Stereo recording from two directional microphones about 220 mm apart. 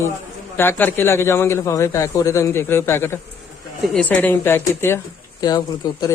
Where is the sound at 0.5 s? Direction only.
10° left (ahead or behind).